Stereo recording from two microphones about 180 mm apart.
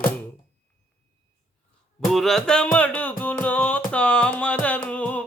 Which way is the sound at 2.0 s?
Centre (ahead or behind).